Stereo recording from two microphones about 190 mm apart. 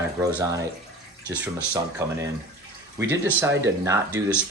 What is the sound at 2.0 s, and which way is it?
Speech, 15° right (ahead or behind).